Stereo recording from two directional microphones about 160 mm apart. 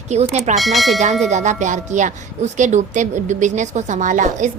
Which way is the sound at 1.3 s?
50° right (ahead or behind).